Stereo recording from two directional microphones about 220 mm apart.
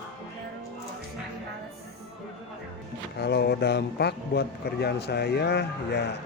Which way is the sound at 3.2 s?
50° left (ahead or behind).